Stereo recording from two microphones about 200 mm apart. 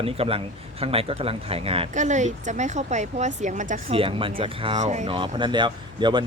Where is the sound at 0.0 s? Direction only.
30° right (ahead or behind).